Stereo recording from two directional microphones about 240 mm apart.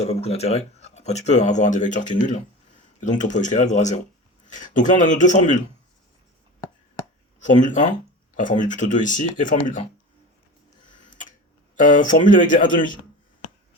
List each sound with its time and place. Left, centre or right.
0.0 s speech: left
7.3 s speech: left
10.8 s tick-tock: left
11.8 s speech: left